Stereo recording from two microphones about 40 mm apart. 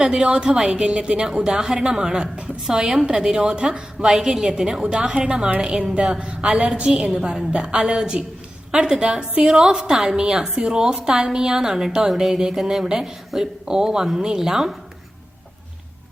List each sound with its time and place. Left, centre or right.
0.3 s a woman's voice: right
1.5 s a woman's voice: centre
4.8 s a woman's voice: right; by 14.8 s centre